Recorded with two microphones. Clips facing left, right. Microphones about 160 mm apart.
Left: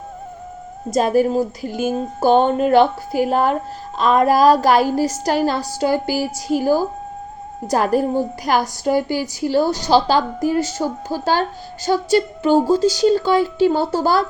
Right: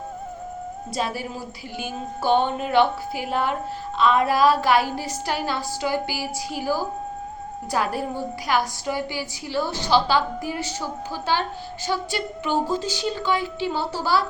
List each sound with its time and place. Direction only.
0.9 s a woman's voice: 45° left (ahead or behind)